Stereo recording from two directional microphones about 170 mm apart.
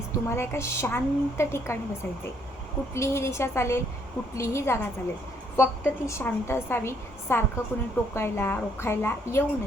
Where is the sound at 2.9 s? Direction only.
15° left (ahead or behind).